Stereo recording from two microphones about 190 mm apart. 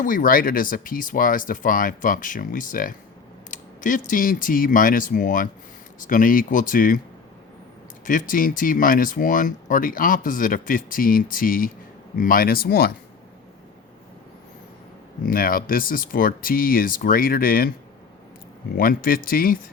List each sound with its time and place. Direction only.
0.0 s speech: 45° left (ahead or behind)
8.0 s speech: 45° left (ahead or behind)
15.3 s speech: 50° left (ahead or behind)
18.8 s speech: 50° left (ahead or behind)